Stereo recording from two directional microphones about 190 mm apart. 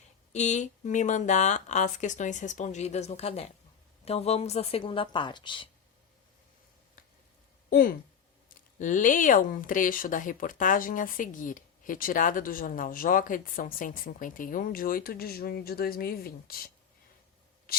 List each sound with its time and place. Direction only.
0.3 s a woman's voice: 40° left (ahead or behind)
7.7 s speech: 50° left (ahead or behind)